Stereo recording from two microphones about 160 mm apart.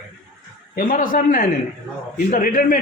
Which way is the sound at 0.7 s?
60° left (ahead or behind).